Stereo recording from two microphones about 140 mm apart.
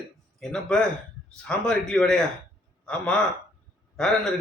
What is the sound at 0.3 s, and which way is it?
A man's voice, 5° left (ahead or behind).